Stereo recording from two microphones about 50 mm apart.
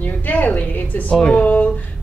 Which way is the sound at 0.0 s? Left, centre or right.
Left.